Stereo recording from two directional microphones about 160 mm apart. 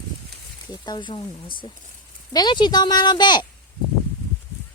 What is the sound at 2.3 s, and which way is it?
Speech, 25° left (ahead or behind).